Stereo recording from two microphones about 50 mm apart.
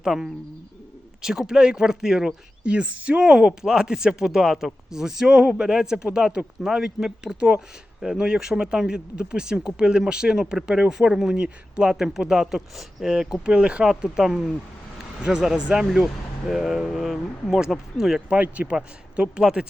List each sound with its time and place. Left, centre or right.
0.0 s speech: centre
3.2 s speech: centre
18.4 s a man's voice: right